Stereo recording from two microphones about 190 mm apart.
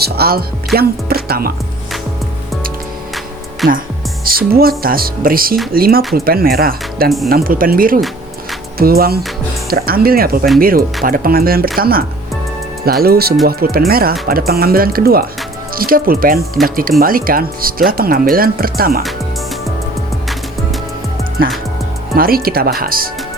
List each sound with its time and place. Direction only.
0.0 s speech: 55° right (ahead or behind)
4.2 s speech: 50° right (ahead or behind)
22.1 s speech: 50° right (ahead or behind)